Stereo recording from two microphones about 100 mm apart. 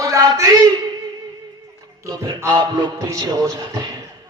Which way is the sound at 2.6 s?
45° right (ahead or behind).